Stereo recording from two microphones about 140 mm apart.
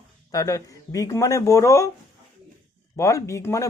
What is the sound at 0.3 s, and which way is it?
Speech, 25° left (ahead or behind).